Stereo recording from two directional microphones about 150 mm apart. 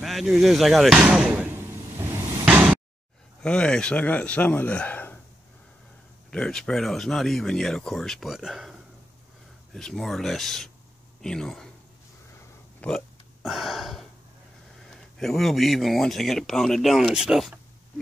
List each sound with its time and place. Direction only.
0.0 s slam: centre (ahead or behind)
3.4 s speech: 5° left (ahead or behind)
6.3 s speech: 5° left (ahead or behind)
12.8 s hiccup: centre (ahead or behind)
14.8 s speech: centre (ahead or behind)